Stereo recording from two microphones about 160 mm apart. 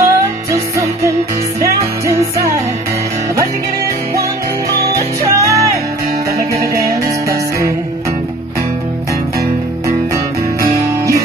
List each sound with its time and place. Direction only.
0.0 s music: 20° right (ahead or behind)
5.3 s music: 20° right (ahead or behind)
9.8 s music: 20° right (ahead or behind)